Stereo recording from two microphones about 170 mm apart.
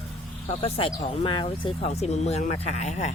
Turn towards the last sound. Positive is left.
turn(degrees=45)  # may be behind; listen again after turning